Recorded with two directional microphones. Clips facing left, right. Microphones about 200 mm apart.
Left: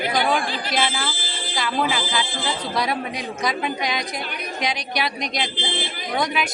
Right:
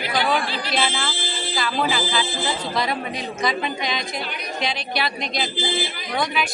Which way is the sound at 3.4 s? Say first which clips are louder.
Even; 10° left (ahead or behind).